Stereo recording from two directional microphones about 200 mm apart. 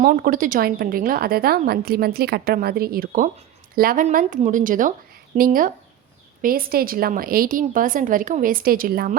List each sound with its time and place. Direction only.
0.0 s a woman's voice: 45° right (ahead or behind)